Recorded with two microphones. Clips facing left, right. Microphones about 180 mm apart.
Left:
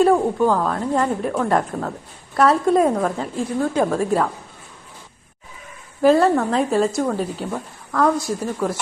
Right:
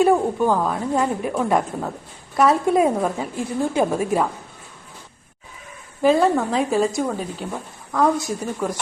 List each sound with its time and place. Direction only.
0.0 s a woman's voice: 5° right (ahead or behind)
6.1 s a woman's voice: centre (ahead or behind)
7.9 s a woman's voice: 20° right (ahead or behind)